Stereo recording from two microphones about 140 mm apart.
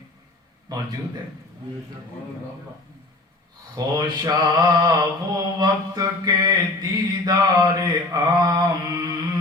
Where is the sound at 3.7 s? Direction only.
25° right (ahead or behind).